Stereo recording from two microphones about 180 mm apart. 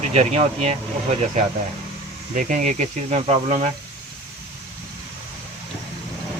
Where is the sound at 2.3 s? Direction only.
45° right (ahead or behind).